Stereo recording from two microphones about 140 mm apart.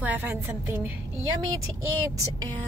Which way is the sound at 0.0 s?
10° right (ahead or behind).